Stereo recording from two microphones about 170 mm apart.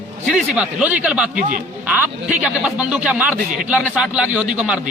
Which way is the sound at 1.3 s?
50° right (ahead or behind).